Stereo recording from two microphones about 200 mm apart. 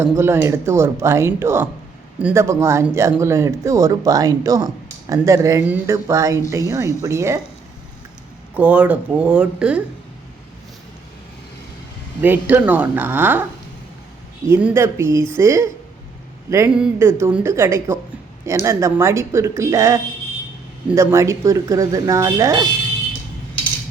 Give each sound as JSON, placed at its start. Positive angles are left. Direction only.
{"t": 0.0, "sound": "speech", "side_deg": -10}
{"t": 8.5, "sound": "speech", "side_deg": -5}
{"t": 12.2, "sound": "speech", "side_deg": -10}
{"t": 14.4, "sound": "speech", "side_deg": -10}